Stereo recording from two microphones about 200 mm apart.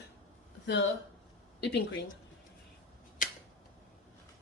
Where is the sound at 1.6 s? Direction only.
60° left (ahead or behind).